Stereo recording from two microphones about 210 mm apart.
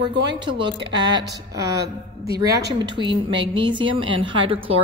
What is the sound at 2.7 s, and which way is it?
A woman's voice, 20° right (ahead or behind).